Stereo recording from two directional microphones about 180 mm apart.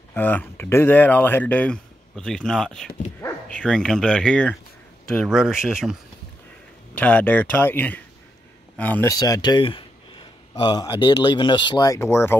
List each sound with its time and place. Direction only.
0.1 s speech: 10° left (ahead or behind)
7.0 s speech: 10° left (ahead or behind)